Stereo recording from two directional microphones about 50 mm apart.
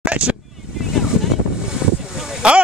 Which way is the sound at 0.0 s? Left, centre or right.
Right.